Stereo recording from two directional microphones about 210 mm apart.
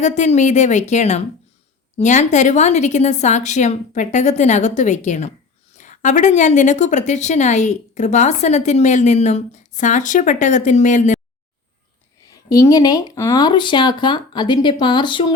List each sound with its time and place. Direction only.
0.0 s a woman's voice: 35° left (ahead or behind)
12.5 s speech: 15° left (ahead or behind)